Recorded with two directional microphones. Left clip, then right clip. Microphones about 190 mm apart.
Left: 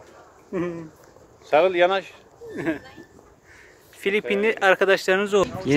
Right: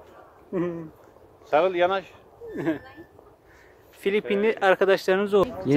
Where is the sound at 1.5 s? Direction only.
35° left (ahead or behind).